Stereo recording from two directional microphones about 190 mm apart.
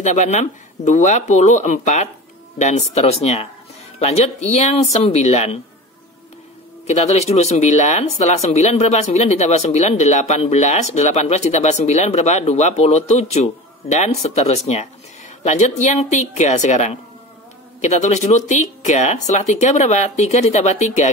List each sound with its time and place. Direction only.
0.0 s speech: 40° left (ahead or behind)
6.9 s speech: 35° left (ahead or behind)